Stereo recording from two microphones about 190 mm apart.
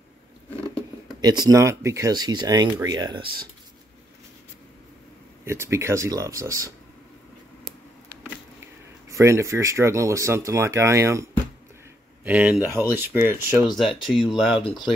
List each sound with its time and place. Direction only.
1.2 s speech: 20° right (ahead or behind)
5.4 s speech: 15° right (ahead or behind)
9.1 s speech: 15° right (ahead or behind)
12.3 s speech: 5° right (ahead or behind)
13.7 s speech: centre (ahead or behind)